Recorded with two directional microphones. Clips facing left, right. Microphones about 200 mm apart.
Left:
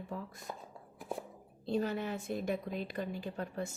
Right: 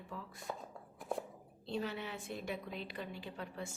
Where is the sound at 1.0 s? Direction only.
Centre (ahead or behind).